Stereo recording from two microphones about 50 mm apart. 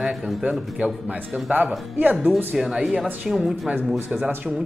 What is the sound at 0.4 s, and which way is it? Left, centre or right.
Speech, centre.